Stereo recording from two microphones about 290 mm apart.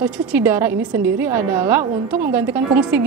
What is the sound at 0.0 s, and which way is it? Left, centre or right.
A woman's voice, centre.